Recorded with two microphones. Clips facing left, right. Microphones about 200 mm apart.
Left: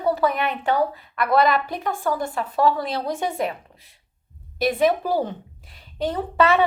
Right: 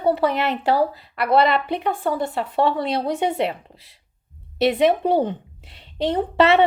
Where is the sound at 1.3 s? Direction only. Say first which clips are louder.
Right 2 dB; 30° right (ahead or behind).